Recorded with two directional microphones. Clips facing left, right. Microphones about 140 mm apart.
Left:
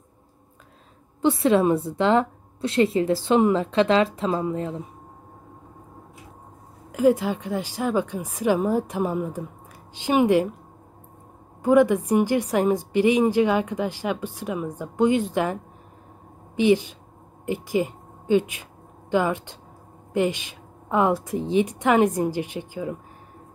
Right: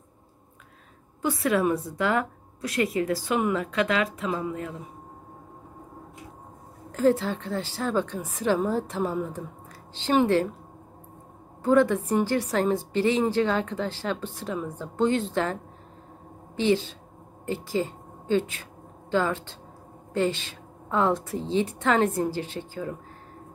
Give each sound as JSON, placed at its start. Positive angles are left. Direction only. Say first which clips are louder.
{"t": 1.2, "sound": "a woman's voice", "louder": "left 5 dB", "side_deg": 25}
{"t": 6.9, "sound": "a woman's voice", "louder": "left 3 dB", "side_deg": 15}
{"t": 11.6, "sound": "a woman's voice", "louder": "left 3 dB", "side_deg": 15}